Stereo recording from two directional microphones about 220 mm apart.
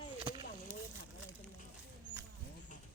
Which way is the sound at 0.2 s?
20° right (ahead or behind).